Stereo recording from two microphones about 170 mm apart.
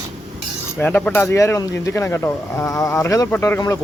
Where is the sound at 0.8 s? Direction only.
10° left (ahead or behind).